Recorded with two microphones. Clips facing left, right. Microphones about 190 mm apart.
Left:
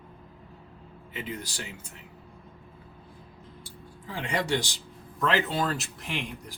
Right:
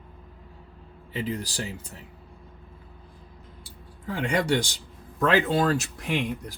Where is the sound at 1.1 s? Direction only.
35° right (ahead or behind).